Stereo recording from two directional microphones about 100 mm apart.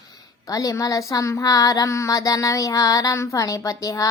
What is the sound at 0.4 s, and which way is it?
Speech, 35° left (ahead or behind).